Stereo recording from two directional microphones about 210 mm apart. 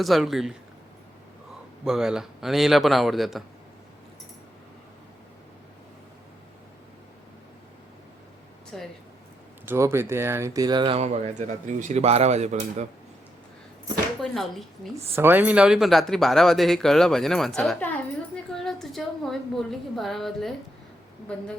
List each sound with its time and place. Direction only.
0.0 s speech: centre (ahead or behind)
1.8 s speech: centre (ahead or behind)
8.7 s speech: centre (ahead or behind)
9.6 s speech: 10° right (ahead or behind); by 12.9 s 35° right (ahead or behind)
14.2 s speech: centre (ahead or behind)
14.9 s speech: 10° right (ahead or behind)